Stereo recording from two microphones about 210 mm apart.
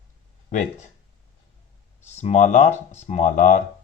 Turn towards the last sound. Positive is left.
turn(degrees=40)  # may be behind; listen again after turning